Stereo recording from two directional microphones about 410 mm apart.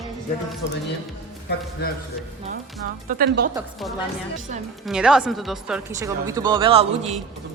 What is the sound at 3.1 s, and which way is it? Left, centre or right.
Speech, right.